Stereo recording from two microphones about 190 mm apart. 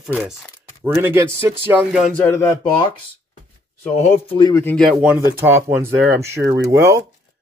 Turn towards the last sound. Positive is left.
turn(degrees=-15)  # may be behind; listen again after turning